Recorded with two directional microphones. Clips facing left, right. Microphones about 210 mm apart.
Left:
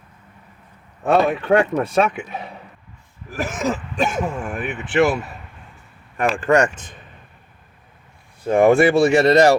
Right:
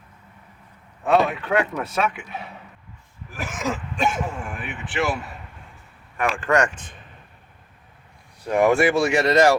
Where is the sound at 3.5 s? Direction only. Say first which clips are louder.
Left 2 dB; 35° left (ahead or behind).